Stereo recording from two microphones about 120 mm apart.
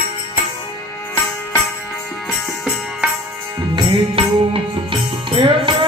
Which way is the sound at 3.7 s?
45° right (ahead or behind).